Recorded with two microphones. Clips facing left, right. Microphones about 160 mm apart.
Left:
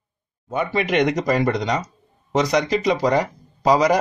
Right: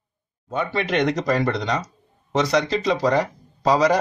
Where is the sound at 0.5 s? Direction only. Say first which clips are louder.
Left 2 dB; 10° left (ahead or behind).